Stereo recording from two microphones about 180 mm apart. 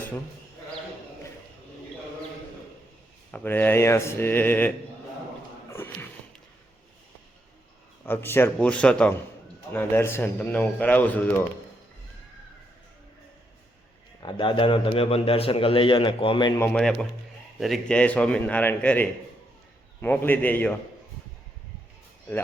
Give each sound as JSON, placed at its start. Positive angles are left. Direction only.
{"t": 3.3, "sound": "speech", "side_deg": 10}
{"t": 5.7, "sound": "speech", "side_deg": 15}
{"t": 8.0, "sound": "speech", "side_deg": 10}
{"t": 14.2, "sound": "a man's voice", "side_deg": 25}
{"t": 16.6, "sound": "speech", "side_deg": 5}